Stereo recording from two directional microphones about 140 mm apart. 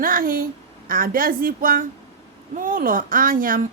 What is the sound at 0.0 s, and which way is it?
Speech, 90° right.